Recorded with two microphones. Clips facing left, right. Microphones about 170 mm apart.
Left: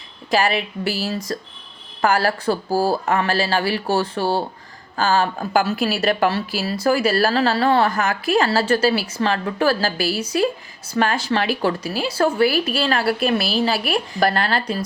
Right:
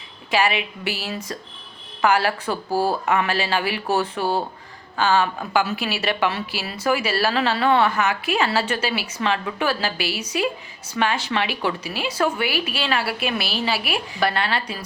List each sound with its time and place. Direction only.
0.3 s speech: 40° left (ahead or behind)